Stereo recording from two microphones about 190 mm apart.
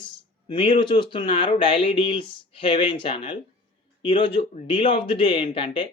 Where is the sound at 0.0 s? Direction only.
25° left (ahead or behind).